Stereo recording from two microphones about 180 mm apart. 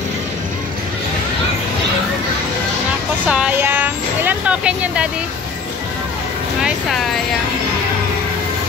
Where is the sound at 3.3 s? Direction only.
5° right (ahead or behind).